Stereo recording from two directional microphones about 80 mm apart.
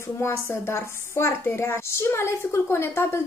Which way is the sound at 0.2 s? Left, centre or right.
Left.